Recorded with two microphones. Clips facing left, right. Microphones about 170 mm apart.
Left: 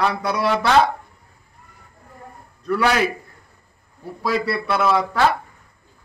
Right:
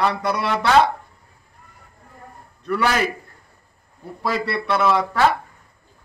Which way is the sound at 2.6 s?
Centre (ahead or behind).